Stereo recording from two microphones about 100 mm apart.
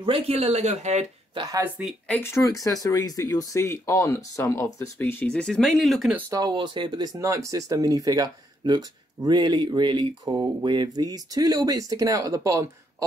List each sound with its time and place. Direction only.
0.3 s speech: 90° right
2.0 s speech: 25° left (ahead or behind)
5.2 s speech: 10° left (ahead or behind)
6.3 s speech: 45° right (ahead or behind)
7.2 s speech: 30° right (ahead or behind)